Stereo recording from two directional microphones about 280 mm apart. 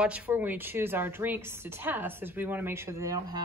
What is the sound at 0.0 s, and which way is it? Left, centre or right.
Speech, centre.